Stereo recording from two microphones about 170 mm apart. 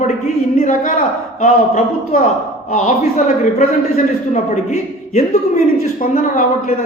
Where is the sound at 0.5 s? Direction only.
40° left (ahead or behind).